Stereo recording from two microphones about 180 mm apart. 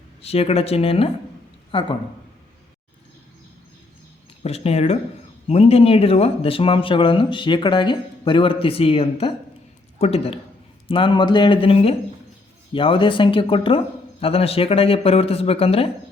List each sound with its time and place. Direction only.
0.2 s speech: 35° left (ahead or behind)
4.4 s speech: 35° left (ahead or behind)